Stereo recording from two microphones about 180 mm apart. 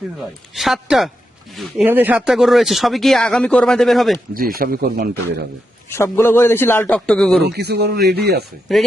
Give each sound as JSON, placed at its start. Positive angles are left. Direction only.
{"t": 0.2, "sound": "speech", "side_deg": 0}
{"t": 4.4, "sound": "a man's voice", "side_deg": -55}
{"t": 5.9, "sound": "a man's voice", "side_deg": 15}
{"t": 7.4, "sound": "a man's voice", "side_deg": -65}
{"t": 8.7, "sound": "speech", "side_deg": 0}